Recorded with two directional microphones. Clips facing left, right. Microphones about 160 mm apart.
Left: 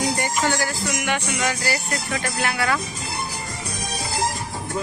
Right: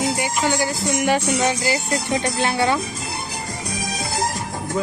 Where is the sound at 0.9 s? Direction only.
30° right (ahead or behind).